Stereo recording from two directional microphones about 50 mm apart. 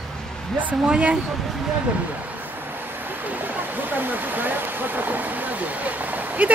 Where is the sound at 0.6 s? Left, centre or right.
Right.